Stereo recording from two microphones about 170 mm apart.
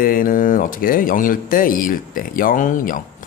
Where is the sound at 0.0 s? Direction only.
55° left (ahead or behind).